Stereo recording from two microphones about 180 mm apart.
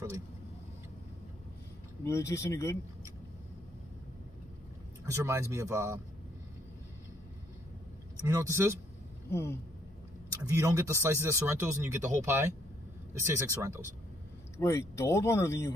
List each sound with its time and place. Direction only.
2.0 s speech: 15° left (ahead or behind)
5.0 s speech: 15° right (ahead or behind)
8.3 s speech: 15° right (ahead or behind)
9.3 s speech: 15° left (ahead or behind)
10.5 s speech: 15° right (ahead or behind)
14.6 s speech: 15° left (ahead or behind)